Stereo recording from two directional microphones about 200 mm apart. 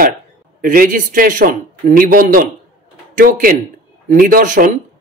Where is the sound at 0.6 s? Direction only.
45° right (ahead or behind).